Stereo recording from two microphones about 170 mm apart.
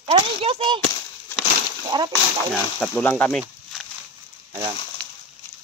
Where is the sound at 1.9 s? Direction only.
25° right (ahead or behind).